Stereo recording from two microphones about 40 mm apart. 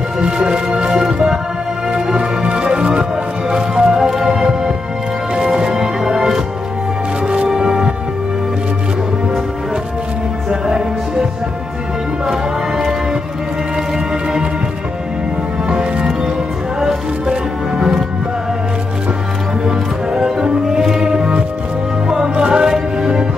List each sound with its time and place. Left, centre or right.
0.2 s music: right
3.4 s music: centre
7.4 s music: centre
10.5 s music: centre
12.3 s music: centre
13.9 s music: centre
15.7 s music: right
17.7 s music: centre
19.6 s music: centre